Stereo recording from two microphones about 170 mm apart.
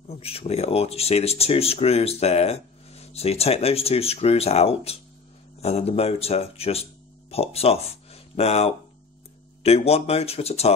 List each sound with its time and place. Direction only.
0.1 s speech: 35° left (ahead or behind)